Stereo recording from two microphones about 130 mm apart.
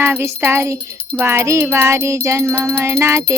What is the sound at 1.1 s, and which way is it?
Music, 20° right (ahead or behind).